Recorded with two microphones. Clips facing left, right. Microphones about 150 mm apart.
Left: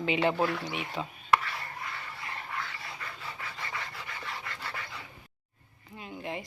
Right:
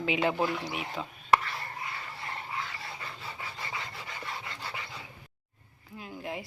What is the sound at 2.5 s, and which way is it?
Dog, 25° right (ahead or behind).